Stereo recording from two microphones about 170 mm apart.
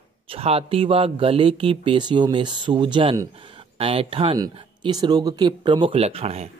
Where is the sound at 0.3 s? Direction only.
35° right (ahead or behind).